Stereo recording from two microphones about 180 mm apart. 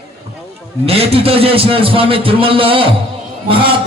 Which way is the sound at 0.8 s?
35° right (ahead or behind).